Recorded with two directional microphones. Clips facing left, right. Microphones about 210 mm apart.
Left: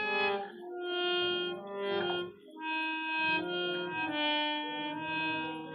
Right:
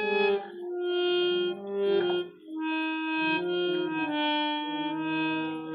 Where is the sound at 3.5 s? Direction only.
35° right (ahead or behind).